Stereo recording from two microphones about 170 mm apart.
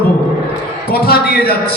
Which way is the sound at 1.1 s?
65° left (ahead or behind).